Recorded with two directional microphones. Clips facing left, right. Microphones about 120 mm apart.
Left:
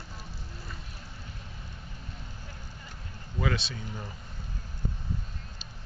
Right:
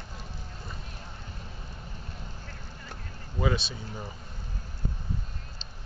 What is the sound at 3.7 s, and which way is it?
Speech, 15° right (ahead or behind).